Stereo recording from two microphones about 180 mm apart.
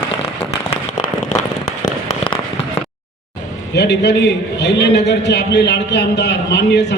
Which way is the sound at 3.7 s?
70° left (ahead or behind).